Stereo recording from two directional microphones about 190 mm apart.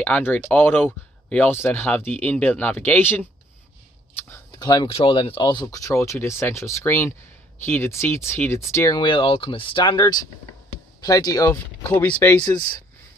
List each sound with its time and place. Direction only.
0.0 s speech: 10° left (ahead or behind)
4.3 s speech: 20° left (ahead or behind)
11.5 s speech: 10° left (ahead or behind)